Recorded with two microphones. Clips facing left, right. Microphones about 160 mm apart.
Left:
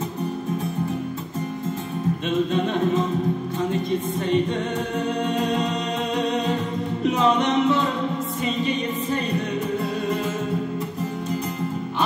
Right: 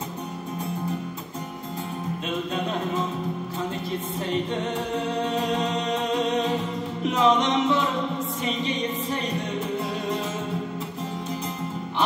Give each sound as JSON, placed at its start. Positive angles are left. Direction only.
{"t": 7.2, "sound": "music", "side_deg": -20}